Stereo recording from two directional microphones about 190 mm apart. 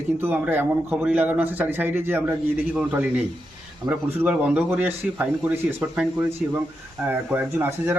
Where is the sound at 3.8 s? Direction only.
25° right (ahead or behind).